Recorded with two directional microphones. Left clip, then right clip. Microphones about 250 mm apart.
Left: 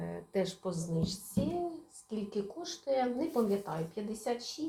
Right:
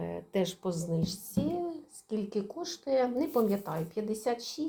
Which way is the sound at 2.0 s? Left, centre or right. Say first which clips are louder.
Right 3 dB; right.